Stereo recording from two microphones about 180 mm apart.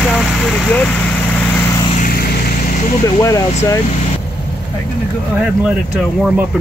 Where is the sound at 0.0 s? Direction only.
10° left (ahead or behind).